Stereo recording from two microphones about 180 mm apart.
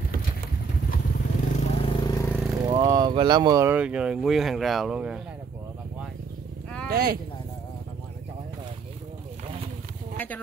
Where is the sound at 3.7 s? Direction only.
5° right (ahead or behind).